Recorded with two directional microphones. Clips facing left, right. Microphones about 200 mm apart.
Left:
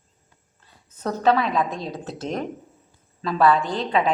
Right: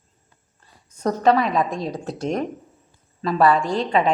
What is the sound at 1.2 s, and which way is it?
A woman's voice, centre (ahead or behind).